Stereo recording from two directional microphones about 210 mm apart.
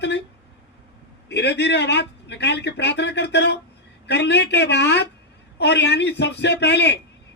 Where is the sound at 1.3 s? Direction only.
55° left (ahead or behind).